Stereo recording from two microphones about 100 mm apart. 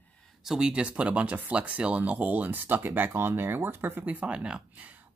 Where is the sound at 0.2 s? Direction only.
Centre (ahead or behind).